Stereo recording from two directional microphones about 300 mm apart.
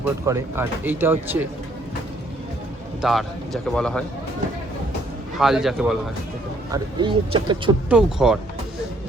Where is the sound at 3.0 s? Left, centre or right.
Centre.